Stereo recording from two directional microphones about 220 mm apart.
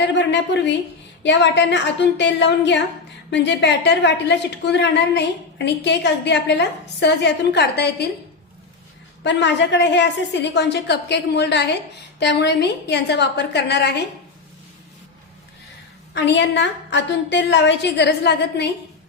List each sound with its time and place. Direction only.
0.0 s a woman's voice: 50° left (ahead or behind)
9.2 s a woman's voice: 55° left (ahead or behind)
16.1 s a woman's voice: 55° left (ahead or behind)